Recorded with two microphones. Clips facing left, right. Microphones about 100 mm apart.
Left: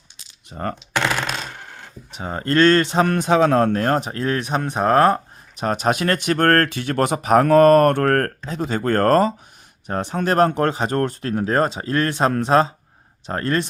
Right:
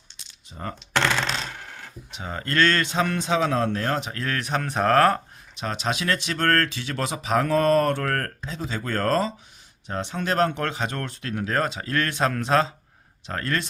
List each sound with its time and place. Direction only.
0.5 s speech: 50° left (ahead or behind)
0.9 s a sound: 10° left (ahead or behind)
2.1 s speech: 35° left (ahead or behind)
3.1 s speech: 50° left (ahead or behind); by 5.2 s 20° left (ahead or behind)
5.5 s speech: 45° left (ahead or behind)